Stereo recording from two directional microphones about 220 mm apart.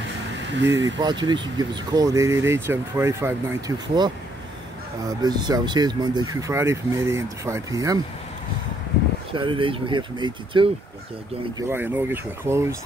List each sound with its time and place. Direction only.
0.5 s speech: 55° right (ahead or behind)
0.8 s speech: 20° right (ahead or behind)
9.3 s speech: 20° right (ahead or behind)
11.5 s speech: 10° right (ahead or behind)